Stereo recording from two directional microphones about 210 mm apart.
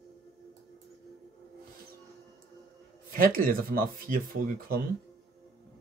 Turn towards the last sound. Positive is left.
turn(degrees=-40)  # may be behind; listen again after turning